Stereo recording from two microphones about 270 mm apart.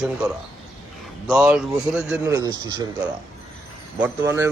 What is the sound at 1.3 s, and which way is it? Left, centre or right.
Speech, centre.